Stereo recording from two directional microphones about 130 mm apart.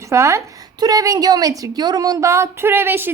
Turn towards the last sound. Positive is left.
turn(degrees=-15)  # may be behind; listen again after turning